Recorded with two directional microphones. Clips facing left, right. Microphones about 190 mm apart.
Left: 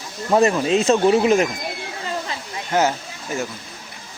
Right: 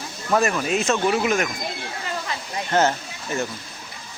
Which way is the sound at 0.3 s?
30° left (ahead or behind).